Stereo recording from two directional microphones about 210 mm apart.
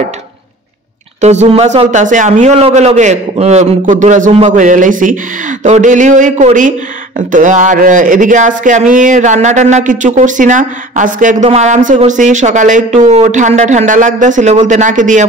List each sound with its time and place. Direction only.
1.2 s speech: 35° right (ahead or behind)